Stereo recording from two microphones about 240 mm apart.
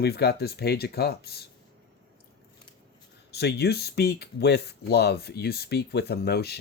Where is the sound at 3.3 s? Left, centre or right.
Left.